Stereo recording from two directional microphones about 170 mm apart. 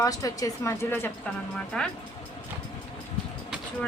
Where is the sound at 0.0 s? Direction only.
20° left (ahead or behind); by 1.9 s 5° left (ahead or behind).